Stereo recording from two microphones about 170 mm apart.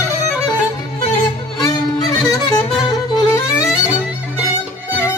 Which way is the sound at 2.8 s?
25° left (ahead or behind).